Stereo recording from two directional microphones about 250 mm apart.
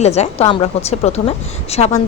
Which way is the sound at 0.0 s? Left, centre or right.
Left.